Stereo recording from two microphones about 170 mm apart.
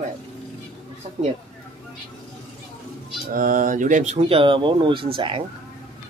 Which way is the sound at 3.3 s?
55° right (ahead or behind).